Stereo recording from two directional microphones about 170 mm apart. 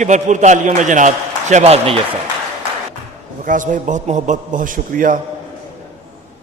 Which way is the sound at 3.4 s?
50° right (ahead or behind).